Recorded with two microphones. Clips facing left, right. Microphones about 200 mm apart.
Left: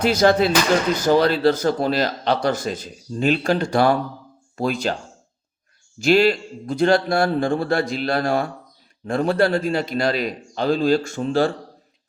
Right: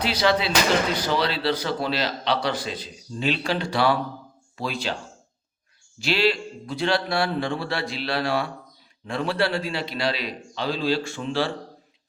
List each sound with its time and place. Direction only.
0.0 s a man's voice: 45° left (ahead or behind)
6.0 s a man's voice: 45° left (ahead or behind)